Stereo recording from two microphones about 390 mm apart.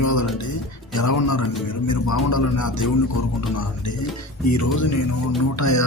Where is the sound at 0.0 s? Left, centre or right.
Left.